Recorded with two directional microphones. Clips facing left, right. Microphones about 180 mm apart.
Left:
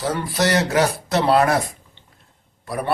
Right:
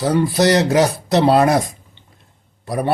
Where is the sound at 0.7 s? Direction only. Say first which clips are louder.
Right 4 dB; 20° right (ahead or behind).